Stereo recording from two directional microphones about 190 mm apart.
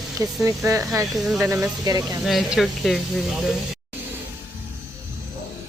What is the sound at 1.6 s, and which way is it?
Speech, 20° right (ahead or behind).